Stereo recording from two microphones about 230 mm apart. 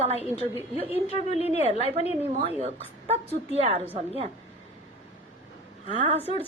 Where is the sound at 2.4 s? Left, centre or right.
Right.